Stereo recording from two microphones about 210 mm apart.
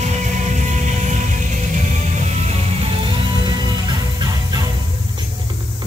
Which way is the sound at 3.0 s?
20° right (ahead or behind).